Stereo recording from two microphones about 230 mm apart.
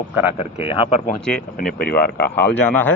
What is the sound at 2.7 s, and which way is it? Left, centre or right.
Speech, centre.